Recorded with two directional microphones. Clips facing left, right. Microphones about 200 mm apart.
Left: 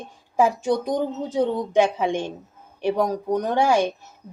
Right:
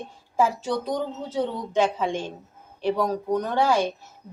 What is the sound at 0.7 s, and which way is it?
Speech, 50° left (ahead or behind).